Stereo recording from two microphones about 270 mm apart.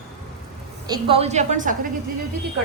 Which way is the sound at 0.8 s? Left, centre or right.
Centre.